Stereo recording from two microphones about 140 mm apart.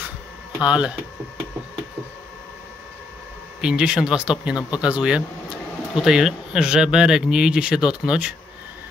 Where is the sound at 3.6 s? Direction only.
5° right (ahead or behind).